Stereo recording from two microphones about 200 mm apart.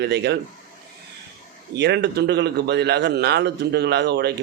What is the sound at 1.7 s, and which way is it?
A man's voice, 60° right (ahead or behind).